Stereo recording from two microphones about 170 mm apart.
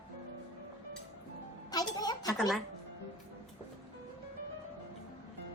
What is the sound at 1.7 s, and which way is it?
Music, 20° left (ahead or behind).